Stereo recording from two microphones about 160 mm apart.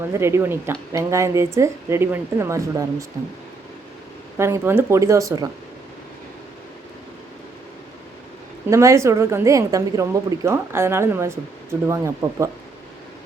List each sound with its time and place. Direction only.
0.1 s a woman's voice: 15° right (ahead or behind)
4.4 s speech: 15° right (ahead or behind)
8.7 s a woman's voice: 20° right (ahead or behind)